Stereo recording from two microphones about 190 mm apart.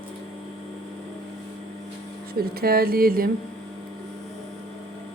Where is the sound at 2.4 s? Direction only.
55° right (ahead or behind).